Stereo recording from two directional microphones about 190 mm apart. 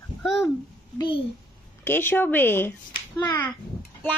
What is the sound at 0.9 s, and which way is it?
Child singing, 25° left (ahead or behind).